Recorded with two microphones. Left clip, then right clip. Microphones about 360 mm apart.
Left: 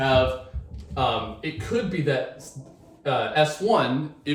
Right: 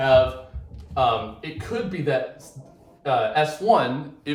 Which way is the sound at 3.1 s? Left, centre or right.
Centre.